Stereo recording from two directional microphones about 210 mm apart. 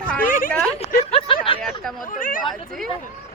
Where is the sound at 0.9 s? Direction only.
25° left (ahead or behind).